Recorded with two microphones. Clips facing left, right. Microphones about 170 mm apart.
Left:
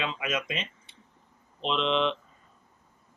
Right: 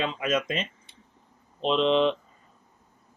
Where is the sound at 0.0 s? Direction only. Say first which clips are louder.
Right 5 dB; 40° right (ahead or behind).